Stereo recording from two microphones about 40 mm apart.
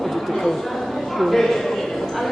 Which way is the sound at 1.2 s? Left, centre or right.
Centre.